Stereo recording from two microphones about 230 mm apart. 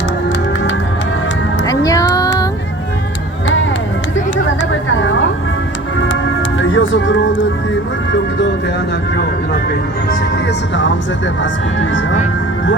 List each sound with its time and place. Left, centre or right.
1.6 s music: centre
4.7 s a sound: left
6.6 s music: left
11.8 s speech: left